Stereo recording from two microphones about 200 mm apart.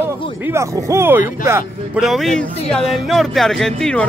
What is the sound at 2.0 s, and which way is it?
Speech, centre (ahead or behind).